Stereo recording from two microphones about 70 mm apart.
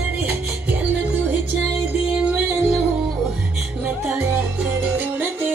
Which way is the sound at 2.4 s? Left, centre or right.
Right.